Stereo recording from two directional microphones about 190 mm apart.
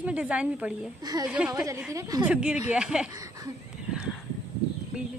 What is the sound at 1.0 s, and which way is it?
Speech, 20° right (ahead or behind).